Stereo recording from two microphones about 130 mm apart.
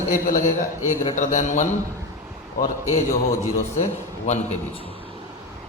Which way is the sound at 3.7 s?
65° left (ahead or behind).